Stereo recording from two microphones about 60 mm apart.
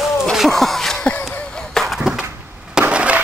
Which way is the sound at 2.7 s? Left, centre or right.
Right.